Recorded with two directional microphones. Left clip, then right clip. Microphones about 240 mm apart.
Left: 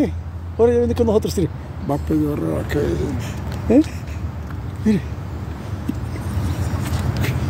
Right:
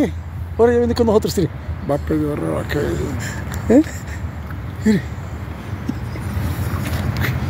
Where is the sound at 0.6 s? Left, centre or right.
Centre.